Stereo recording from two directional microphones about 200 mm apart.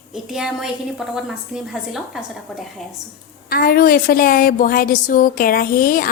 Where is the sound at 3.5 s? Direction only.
45° left (ahead or behind).